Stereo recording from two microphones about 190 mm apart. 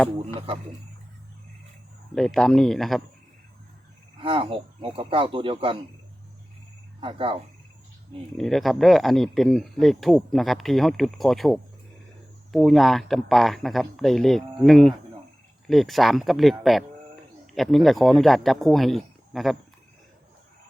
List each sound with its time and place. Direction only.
0.3 s speech: 25° right (ahead or behind)
2.1 s speech: centre (ahead or behind)
4.2 s speech: 25° right (ahead or behind)
7.0 s speech: 25° right (ahead or behind)
8.4 s speech: centre (ahead or behind)